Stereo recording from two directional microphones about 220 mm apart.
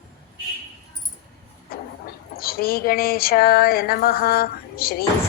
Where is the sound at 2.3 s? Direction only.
45° left (ahead or behind).